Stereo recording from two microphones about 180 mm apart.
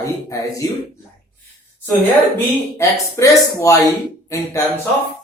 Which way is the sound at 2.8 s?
15° left (ahead or behind).